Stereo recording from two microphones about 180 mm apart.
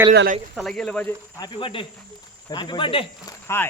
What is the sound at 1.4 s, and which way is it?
Speech, 30° left (ahead or behind).